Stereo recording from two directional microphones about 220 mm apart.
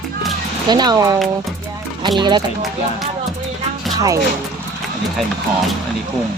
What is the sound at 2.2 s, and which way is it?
Speech, 20° right (ahead or behind).